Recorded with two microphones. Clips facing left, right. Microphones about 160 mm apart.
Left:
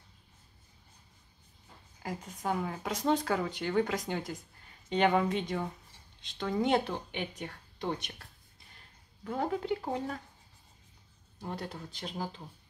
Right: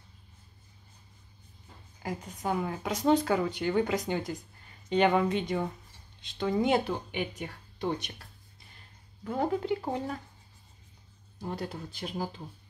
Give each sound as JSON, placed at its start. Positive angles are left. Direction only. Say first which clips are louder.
{"t": 2.0, "sound": "speech", "louder": "right 2 dB", "side_deg": 0}
{"t": 9.2, "sound": "speech", "louder": "right 3 dB", "side_deg": -5}
{"t": 11.4, "sound": "speech", "louder": "right 3 dB", "side_deg": -5}